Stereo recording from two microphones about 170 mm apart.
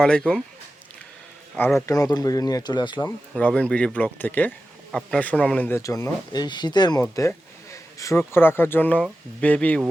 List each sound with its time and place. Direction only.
0.0 s speech: 5° left (ahead or behind)
1.5 s speech: 15° left (ahead or behind)
3.0 s speech: 5° left (ahead or behind)